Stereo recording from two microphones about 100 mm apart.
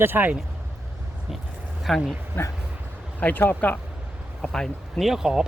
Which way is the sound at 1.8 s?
Centre (ahead or behind).